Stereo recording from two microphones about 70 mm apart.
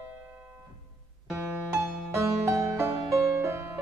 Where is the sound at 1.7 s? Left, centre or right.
Right.